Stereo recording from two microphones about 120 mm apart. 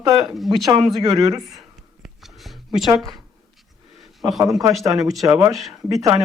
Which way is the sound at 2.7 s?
Centre (ahead or behind).